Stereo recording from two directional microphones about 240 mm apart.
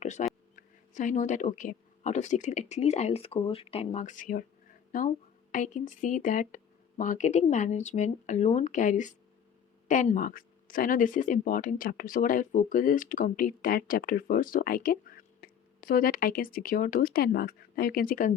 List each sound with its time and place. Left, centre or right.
0.0 s speech: left